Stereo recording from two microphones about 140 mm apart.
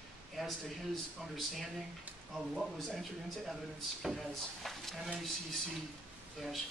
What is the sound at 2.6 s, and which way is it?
Speech, centre (ahead or behind).